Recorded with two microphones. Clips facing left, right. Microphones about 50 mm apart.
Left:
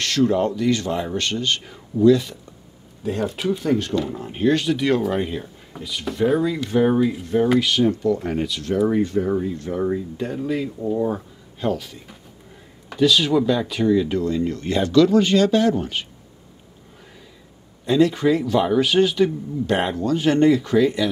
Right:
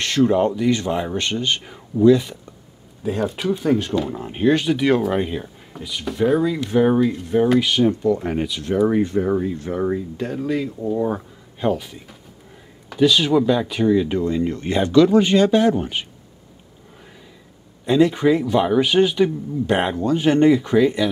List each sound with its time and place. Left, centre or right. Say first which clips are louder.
0.0 s speech: right 2 dB; right
3.0 s speech: right 1 dB; centre
7.3 s speech: right 1 dB; centre
10.1 s speech: right 1 dB; centre
11.1 s speech: right 1 dB; centre
13.0 s speech: right 1 dB; centre
17.8 s speech: right 1 dB; centre